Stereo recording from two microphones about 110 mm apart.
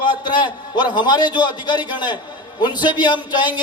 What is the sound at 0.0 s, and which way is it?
A man's voice, 45° left (ahead or behind).